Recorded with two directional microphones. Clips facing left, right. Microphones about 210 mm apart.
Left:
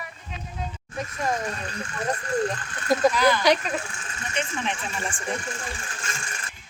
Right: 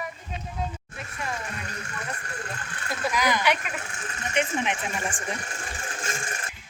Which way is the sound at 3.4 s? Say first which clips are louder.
Left 5 dB; 35° left (ahead or behind).